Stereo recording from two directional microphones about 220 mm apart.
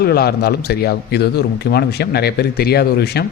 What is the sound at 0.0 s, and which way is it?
Speech, 45° left (ahead or behind).